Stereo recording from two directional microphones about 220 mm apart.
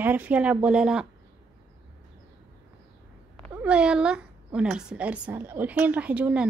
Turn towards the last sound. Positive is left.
turn(degrees=-5)  # may be behind; listen again after turning